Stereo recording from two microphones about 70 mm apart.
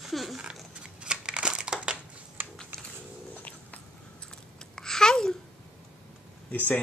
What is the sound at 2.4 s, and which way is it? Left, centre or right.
Typing, right.